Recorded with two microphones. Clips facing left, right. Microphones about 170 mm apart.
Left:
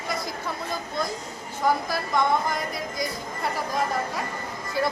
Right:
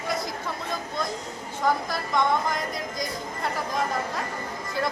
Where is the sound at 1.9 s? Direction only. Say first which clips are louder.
Left 1 dB; 5° left (ahead or behind).